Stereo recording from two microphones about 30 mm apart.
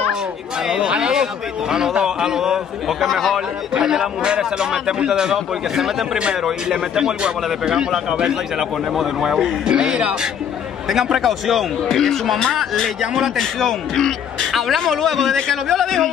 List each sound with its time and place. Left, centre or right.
0.1 s a sound: right
0.7 s speech: right
3.0 s speech: centre
3.8 s speech: right
5.2 s speech: centre
8.5 s a man's voice: centre
9.7 s speech: right
10.9 s speech: centre
11.9 s speech: centre
13.0 s speech: centre
13.9 s speech: centre
14.5 s a man's voice: centre